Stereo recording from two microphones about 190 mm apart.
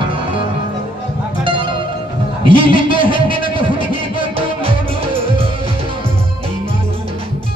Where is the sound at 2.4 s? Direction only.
25° right (ahead or behind).